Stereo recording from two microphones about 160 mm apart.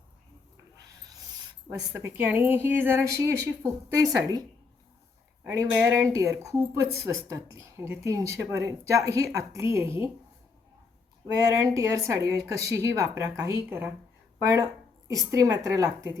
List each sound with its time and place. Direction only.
1.9 s speech: 15° right (ahead or behind)
11.3 s a woman's voice: 20° right (ahead or behind)